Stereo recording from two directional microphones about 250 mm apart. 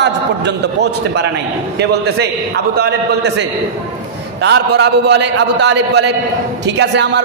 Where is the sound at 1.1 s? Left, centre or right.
Right.